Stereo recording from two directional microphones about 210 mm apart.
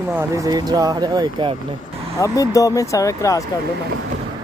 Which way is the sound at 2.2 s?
15° left (ahead or behind).